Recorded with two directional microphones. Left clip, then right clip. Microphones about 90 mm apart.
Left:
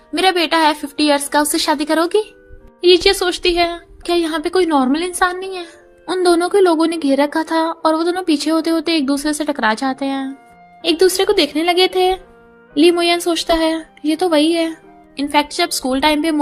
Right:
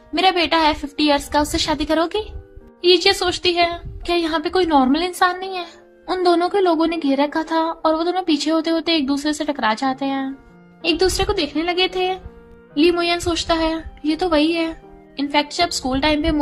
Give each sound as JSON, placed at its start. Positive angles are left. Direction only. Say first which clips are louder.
{"t": 0.1, "sound": "speech", "louder": "left 2 dB", "side_deg": 40}
{"t": 12.7, "sound": "speech", "louder": "left 4 dB", "side_deg": 50}